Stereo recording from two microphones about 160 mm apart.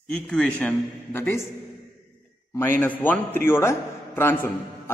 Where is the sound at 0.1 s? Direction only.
10° left (ahead or behind).